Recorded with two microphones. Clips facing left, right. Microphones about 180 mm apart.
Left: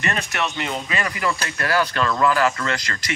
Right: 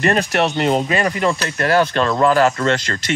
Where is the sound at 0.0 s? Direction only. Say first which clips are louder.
Right 9 dB; 35° right (ahead or behind).